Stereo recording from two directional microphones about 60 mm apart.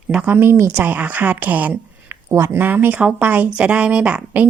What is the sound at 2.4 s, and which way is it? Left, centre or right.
Speech, right.